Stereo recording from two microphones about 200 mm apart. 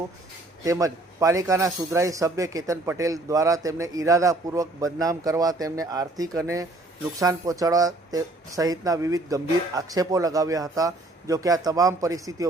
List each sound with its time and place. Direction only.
0.6 s speech: 15° right (ahead or behind)